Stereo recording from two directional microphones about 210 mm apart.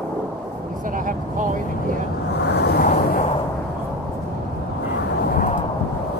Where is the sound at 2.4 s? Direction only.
50° left (ahead or behind).